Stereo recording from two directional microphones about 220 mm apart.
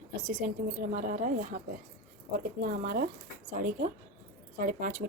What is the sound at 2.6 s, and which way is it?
Speech, 40° right (ahead or behind).